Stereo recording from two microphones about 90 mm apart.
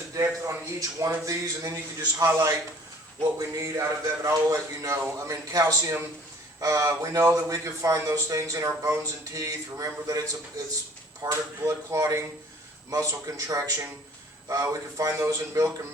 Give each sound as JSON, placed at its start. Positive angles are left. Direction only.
{"t": 0.1, "sound": "a man's voice", "side_deg": -35}